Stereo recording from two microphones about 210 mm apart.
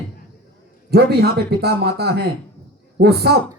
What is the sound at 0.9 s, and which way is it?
A woman's voice, 50° right (ahead or behind).